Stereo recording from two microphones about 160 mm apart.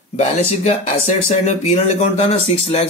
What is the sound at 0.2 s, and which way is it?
Speech, 45° left (ahead or behind).